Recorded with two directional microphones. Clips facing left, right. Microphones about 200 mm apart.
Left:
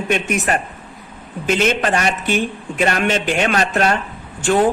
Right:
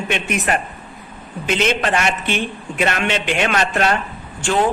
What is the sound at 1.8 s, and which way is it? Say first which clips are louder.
Speech: left 1 dB; 35° left (ahead or behind).